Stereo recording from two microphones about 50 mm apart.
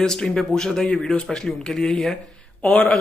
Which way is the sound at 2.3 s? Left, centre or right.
Left.